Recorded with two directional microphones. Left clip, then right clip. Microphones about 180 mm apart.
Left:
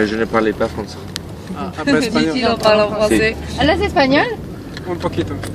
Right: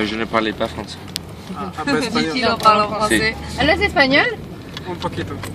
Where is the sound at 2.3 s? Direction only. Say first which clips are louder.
Even; 50° right (ahead or behind).